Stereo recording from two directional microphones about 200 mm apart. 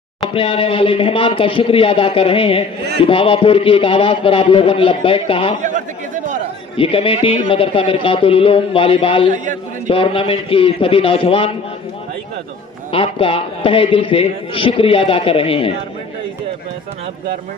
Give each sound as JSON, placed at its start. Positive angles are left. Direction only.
{"t": 0.3, "sound": "a man's voice", "side_deg": 25}
{"t": 5.6, "sound": "speech", "side_deg": -40}
{"t": 6.8, "sound": "a man's voice", "side_deg": 25}
{"t": 12.9, "sound": "a man's voice", "side_deg": 25}